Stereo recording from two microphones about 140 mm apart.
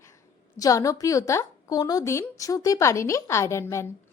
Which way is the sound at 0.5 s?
25° left (ahead or behind).